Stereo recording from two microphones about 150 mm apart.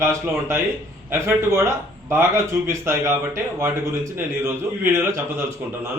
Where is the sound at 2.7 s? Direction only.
20° right (ahead or behind).